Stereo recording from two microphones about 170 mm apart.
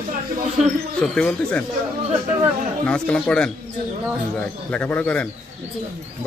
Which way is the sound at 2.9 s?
5° left (ahead or behind).